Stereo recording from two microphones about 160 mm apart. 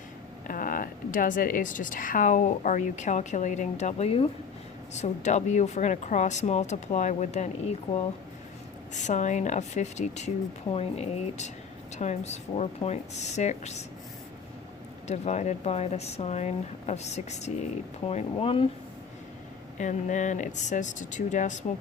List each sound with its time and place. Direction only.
0.4 s a woman's voice: 60° left (ahead or behind)
8.9 s a woman's voice: 50° left (ahead or behind)
15.0 s a woman's voice: 45° left (ahead or behind)
19.8 s a woman's voice: 50° left (ahead or behind)